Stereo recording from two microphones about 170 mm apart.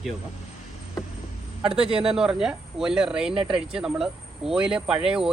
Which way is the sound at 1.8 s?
35° right (ahead or behind).